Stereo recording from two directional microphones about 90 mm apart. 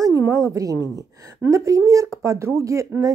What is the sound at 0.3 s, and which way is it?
Speech, 40° right (ahead or behind).